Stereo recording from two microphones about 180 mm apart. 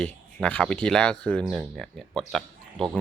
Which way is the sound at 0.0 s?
5° left (ahead or behind).